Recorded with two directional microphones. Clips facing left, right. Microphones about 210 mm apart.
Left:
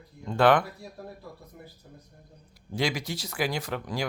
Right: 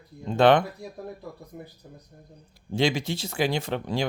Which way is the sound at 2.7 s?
25° right (ahead or behind).